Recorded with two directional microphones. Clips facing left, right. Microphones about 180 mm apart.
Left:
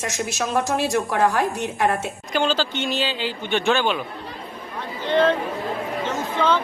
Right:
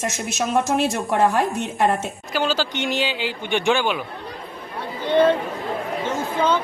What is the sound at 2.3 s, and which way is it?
Speech, 10° right (ahead or behind).